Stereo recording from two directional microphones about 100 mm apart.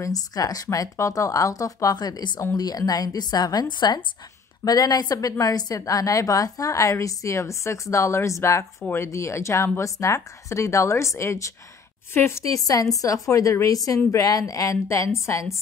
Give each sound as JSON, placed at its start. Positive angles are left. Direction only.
{"t": 0.0, "sound": "a woman's voice", "side_deg": 35}